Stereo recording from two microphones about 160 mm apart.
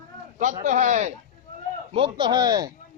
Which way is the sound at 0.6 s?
50° right (ahead or behind).